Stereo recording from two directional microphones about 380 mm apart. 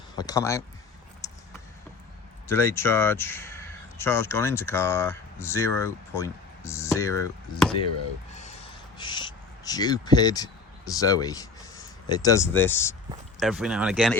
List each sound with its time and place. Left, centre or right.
0.2 s speech: centre
1.2 s a sound: centre
2.5 s speech: centre
8.3 s a sound: centre
9.0 s crow: centre
9.6 s speech: centre